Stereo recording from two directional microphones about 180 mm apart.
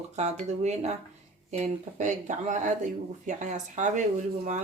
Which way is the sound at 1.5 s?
40° right (ahead or behind).